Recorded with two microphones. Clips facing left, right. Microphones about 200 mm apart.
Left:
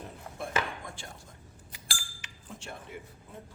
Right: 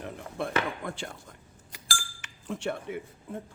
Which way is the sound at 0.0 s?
70° right (ahead or behind).